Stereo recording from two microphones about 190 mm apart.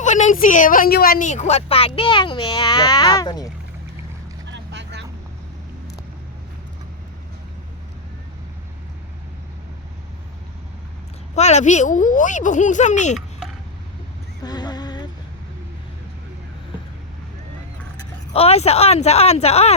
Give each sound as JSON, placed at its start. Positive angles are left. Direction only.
{"t": 0.0, "sound": "a woman's voice", "side_deg": 40}
{"t": 4.5, "sound": "vehicle", "side_deg": -65}
{"t": 11.3, "sound": "a woman's voice", "side_deg": 35}
{"t": 14.4, "sound": "music", "side_deg": 20}
{"t": 18.3, "sound": "a woman's voice", "side_deg": 35}